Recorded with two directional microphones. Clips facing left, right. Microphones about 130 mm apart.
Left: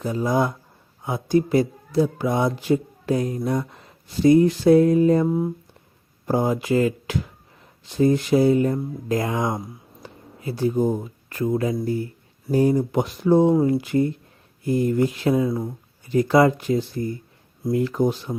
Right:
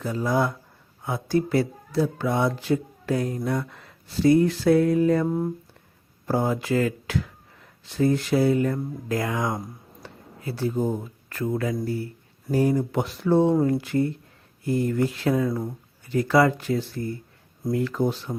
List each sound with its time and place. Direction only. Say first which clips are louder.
0.0 s speech: left 2 dB; 15° left (ahead or behind)
5.2 s speech: left 3 dB; 5° left (ahead or behind)
6.2 s speech: left 3 dB; 15° left (ahead or behind)